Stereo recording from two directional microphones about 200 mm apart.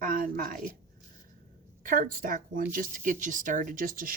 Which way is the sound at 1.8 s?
45° right (ahead or behind).